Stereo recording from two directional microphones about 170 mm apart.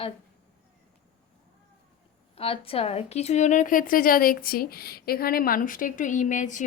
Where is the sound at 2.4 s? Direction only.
35° left (ahead or behind).